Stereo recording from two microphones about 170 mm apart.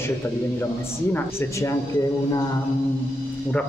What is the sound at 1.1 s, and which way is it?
Speech, 15° left (ahead or behind).